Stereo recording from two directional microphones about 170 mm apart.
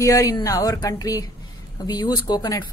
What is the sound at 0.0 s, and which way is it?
A woman's voice, 20° left (ahead or behind).